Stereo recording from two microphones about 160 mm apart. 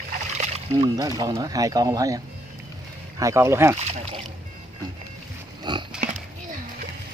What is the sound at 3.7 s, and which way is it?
Speech, 40° right (ahead or behind).